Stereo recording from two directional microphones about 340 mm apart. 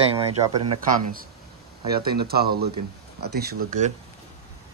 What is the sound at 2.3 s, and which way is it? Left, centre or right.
Speech, right.